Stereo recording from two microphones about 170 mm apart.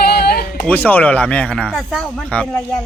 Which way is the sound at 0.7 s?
10° left (ahead or behind).